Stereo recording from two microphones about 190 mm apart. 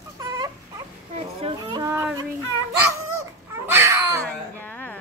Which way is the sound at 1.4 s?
20° right (ahead or behind).